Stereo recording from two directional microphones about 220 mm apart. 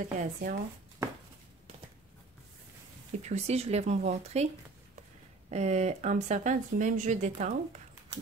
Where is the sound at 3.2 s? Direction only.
30° right (ahead or behind).